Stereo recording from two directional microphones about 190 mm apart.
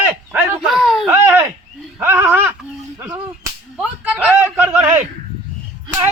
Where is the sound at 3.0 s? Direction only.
15° right (ahead or behind).